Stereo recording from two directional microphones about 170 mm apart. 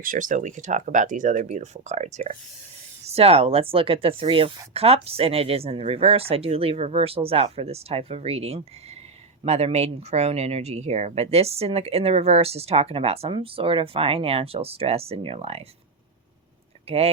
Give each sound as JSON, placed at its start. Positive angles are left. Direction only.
{"t": 0.0, "sound": "speech", "side_deg": -50}
{"t": 16.9, "sound": "speech", "side_deg": -35}